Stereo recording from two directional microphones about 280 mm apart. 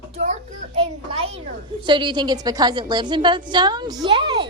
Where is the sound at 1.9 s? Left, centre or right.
Centre.